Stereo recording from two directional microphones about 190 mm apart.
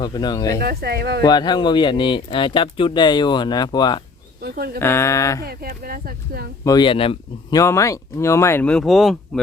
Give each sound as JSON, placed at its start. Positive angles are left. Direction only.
{"t": 0.0, "sound": "speech", "side_deg": 20}
{"t": 0.6, "sound": "speech", "side_deg": -55}
{"t": 1.2, "sound": "speech", "side_deg": 20}
{"t": 4.4, "sound": "speech", "side_deg": -55}
{"t": 4.8, "sound": "speech", "side_deg": 15}
{"t": 5.4, "sound": "speech", "side_deg": -50}
{"t": 6.7, "sound": "speech", "side_deg": 25}
{"t": 7.6, "sound": "speech", "side_deg": 15}